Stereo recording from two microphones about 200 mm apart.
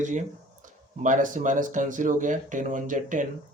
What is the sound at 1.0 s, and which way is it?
Speech, 40° right (ahead or behind).